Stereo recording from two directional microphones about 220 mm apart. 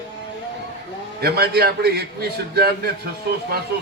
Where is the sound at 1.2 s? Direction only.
45° right (ahead or behind).